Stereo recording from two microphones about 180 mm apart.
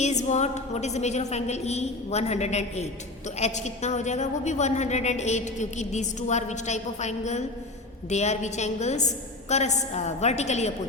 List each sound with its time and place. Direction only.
0.0 s a woman's voice: 40° left (ahead or behind)